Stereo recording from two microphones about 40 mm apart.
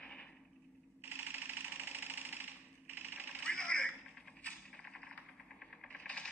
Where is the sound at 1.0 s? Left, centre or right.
Right.